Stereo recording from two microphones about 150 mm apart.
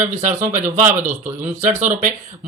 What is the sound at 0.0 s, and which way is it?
Speech, 55° right (ahead or behind).